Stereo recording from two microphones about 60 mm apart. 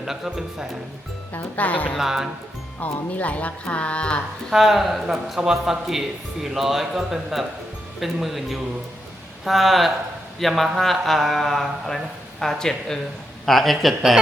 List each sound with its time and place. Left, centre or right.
0.3 s speech: centre
1.3 s speech: left
2.0 s speech: centre
2.8 s speech: left
4.5 s a man's voice: centre